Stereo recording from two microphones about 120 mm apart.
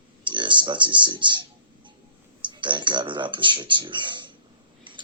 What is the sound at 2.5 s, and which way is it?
Speech, 40° right (ahead or behind).